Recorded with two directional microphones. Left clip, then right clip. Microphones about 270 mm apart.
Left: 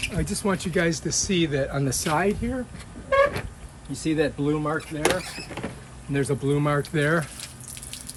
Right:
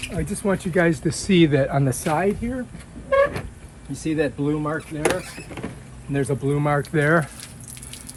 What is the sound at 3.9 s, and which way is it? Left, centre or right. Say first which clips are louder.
Speech: right 1 dB; centre.